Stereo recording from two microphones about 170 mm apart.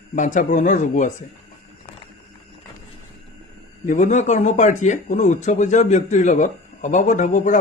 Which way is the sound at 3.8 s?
45° left (ahead or behind).